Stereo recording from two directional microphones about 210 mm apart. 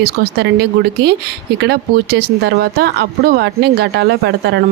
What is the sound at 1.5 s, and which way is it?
Speech, 50° right (ahead or behind).